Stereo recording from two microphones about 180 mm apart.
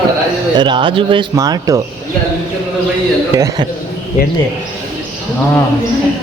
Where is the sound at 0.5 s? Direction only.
25° right (ahead or behind).